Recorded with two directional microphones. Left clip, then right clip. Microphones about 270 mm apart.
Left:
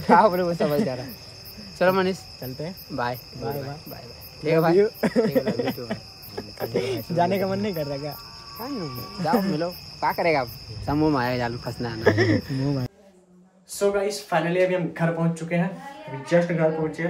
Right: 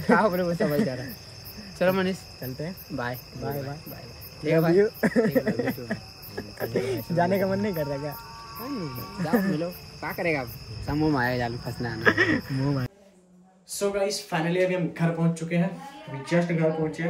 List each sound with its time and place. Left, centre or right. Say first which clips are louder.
0.1 s cricket: left 5 dB; left
0.4 s cricket: left 3 dB; centre
1.8 s cricket: left 3 dB; left
2.4 s cricket: left 1 dB; centre
8.5 s speech: left 2 dB; left
8.8 s cricket: left 6 dB; centre
9.6 s cricket: left 5 dB; left
11.6 s cricket: left 2 dB; centre
12.0 s speech: left 1 dB; centre
12.4 s speech: left 1 dB; left
13.7 s cricket: left 3 dB; centre